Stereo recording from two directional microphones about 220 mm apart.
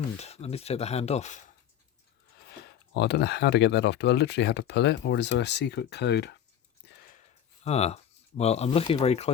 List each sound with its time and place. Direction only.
0.2 s speech: 30° left (ahead or behind)
2.9 s speech: 50° left (ahead or behind)
6.8 s a sound: 50° left (ahead or behind)
7.6 s speech: 30° left (ahead or behind)